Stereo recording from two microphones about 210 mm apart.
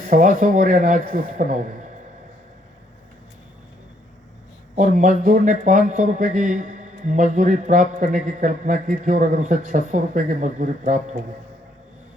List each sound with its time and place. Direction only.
0.1 s speech: 40° right (ahead or behind)
4.7 s speech: 35° right (ahead or behind)